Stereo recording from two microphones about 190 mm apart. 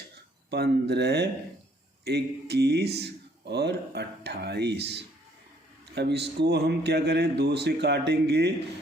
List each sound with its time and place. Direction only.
0.5 s speech: 60° right (ahead or behind)